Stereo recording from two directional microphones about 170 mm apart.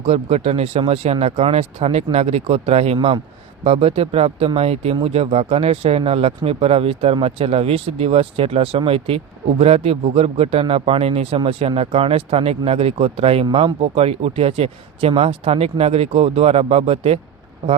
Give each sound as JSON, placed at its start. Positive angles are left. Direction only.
{"t": 0.0, "sound": "speech", "side_deg": -35}